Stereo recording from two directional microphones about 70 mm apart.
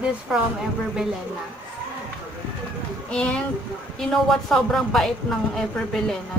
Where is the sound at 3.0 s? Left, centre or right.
Centre.